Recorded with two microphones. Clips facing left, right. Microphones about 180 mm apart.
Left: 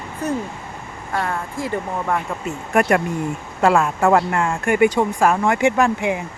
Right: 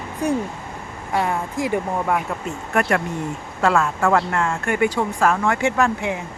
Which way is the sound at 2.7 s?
15° left (ahead or behind).